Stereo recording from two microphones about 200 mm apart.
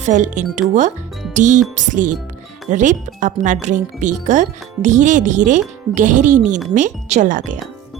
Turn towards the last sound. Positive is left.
turn(degrees=-40)  # may be behind; listen again after turning